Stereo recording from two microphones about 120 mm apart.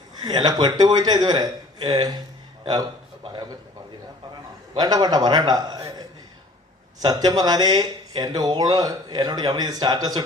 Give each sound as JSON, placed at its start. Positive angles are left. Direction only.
{"t": 0.2, "sound": "speech", "side_deg": -35}
{"t": 4.8, "sound": "speech", "side_deg": -35}